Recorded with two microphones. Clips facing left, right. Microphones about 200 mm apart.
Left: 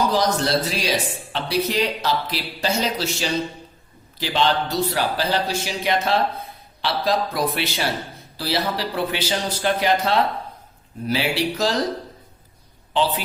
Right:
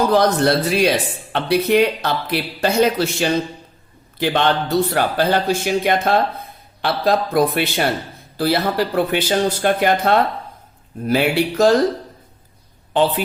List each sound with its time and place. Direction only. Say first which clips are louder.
0.1 s speech: right 5 dB; 60° right (ahead or behind)
12.9 s speech: right 5 dB; 55° right (ahead or behind)